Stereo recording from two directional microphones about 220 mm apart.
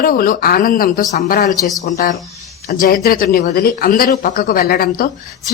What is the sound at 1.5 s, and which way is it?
Speech, 15° left (ahead or behind).